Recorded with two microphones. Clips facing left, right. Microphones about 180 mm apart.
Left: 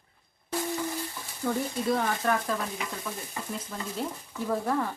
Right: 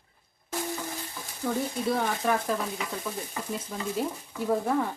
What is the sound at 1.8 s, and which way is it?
Speech, 10° right (ahead or behind).